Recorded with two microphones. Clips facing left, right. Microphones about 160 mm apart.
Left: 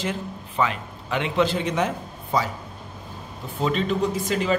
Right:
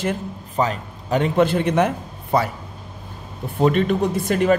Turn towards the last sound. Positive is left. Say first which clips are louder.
# right 5 dB
turn(degrees=-60)  # may be behind; listen again after turning